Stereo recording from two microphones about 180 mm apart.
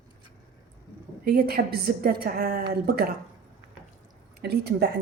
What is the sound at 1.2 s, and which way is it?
A woman's voice, 60° right (ahead or behind).